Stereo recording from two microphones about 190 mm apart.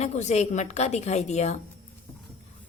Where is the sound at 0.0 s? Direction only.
35° left (ahead or behind).